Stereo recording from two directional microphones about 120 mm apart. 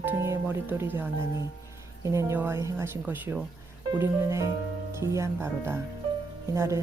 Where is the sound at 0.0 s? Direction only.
20° right (ahead or behind).